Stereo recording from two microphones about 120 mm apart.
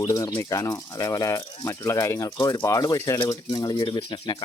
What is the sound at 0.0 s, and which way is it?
Speech, 25° left (ahead or behind).